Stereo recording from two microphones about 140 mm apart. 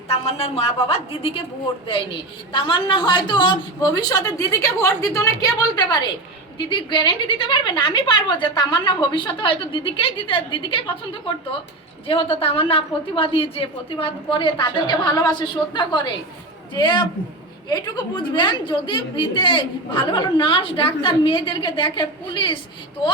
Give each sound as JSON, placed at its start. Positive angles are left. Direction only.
{"t": 0.1, "sound": "a woman's voice", "side_deg": 45}
{"t": 2.5, "sound": "a woman's voice", "side_deg": 35}
{"t": 12.0, "sound": "a woman's voice", "side_deg": 40}